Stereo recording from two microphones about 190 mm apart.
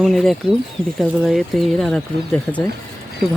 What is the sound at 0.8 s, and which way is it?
Speech, 30° right (ahead or behind).